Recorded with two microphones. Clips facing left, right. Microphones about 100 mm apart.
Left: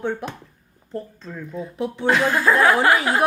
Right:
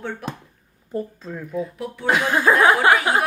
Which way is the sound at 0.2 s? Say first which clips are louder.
Even; 20° left (ahead or behind).